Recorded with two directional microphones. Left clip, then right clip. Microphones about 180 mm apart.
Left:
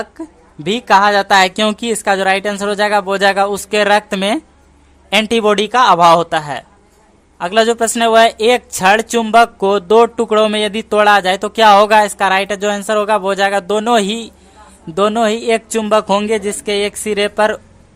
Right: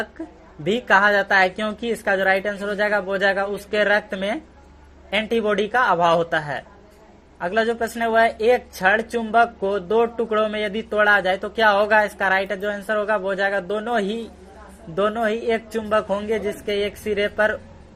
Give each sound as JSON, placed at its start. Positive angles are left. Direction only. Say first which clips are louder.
{"t": 0.6, "sound": "a woman's voice", "louder": "left 6 dB", "side_deg": 30}